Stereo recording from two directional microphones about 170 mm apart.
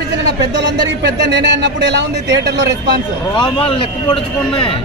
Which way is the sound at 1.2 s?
90° right.